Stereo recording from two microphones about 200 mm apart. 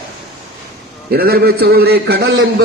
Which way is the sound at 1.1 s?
50° right (ahead or behind).